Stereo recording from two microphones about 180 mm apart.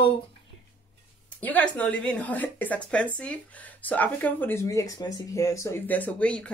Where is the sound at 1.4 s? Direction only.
10° left (ahead or behind).